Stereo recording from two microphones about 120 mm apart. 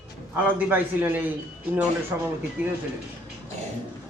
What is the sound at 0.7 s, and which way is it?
Speech, 15° right (ahead or behind).